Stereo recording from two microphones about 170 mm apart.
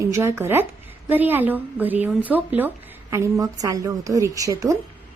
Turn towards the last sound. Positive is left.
turn(degrees=-20)  # may be behind; listen again after turning